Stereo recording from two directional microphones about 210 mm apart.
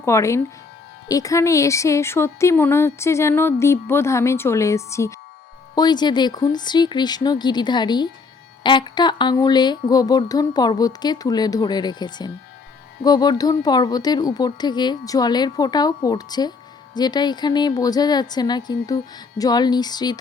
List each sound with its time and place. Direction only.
0.0 s speech: 15° left (ahead or behind)